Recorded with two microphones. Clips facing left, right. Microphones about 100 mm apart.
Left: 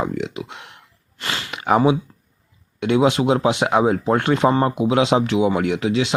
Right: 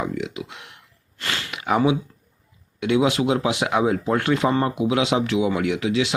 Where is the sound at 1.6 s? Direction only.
35° left (ahead or behind).